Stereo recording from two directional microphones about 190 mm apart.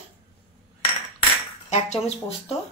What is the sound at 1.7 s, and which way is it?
Speech, 35° left (ahead or behind).